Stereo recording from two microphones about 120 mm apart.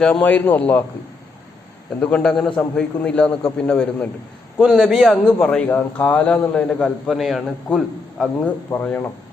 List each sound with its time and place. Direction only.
0.0 s a man's voice: 10° left (ahead or behind)
2.0 s a man's voice: 10° left (ahead or behind)
4.6 s a man's voice: 5° right (ahead or behind)
8.7 s a man's voice: 15° left (ahead or behind)